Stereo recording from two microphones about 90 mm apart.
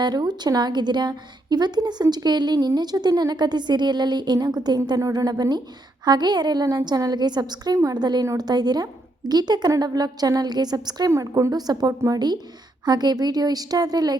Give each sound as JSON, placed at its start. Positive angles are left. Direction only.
{"t": 0.0, "sound": "speech", "side_deg": -50}
{"t": 11.1, "sound": "speech", "side_deg": -35}